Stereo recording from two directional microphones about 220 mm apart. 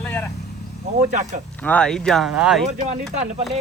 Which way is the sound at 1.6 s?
5° left (ahead or behind).